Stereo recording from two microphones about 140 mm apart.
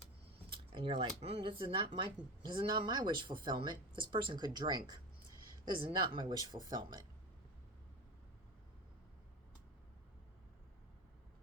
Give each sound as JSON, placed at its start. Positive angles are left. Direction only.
{"t": 0.5, "sound": "speech", "side_deg": -35}